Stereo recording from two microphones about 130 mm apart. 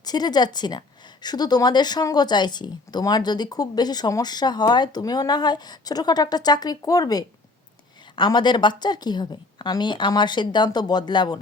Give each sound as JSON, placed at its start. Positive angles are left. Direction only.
{"t": 0.0, "sound": "a woman's voice", "side_deg": 30}